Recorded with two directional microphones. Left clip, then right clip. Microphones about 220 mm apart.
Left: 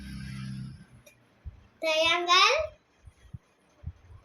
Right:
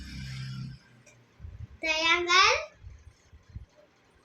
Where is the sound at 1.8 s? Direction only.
10° right (ahead or behind).